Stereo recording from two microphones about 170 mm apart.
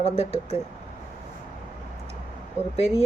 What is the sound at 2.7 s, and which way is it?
Speech, 40° left (ahead or behind).